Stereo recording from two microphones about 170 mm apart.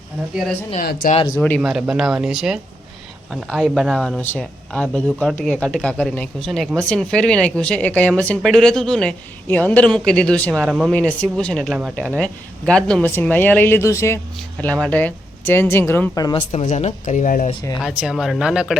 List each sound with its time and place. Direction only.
0.8 s speech: 55° left (ahead or behind)
1.4 s speech: 5° left (ahead or behind); by 16.4 s 20° left (ahead or behind)
16.5 s speech: 45° left (ahead or behind)
17.7 s speech: centre (ahead or behind)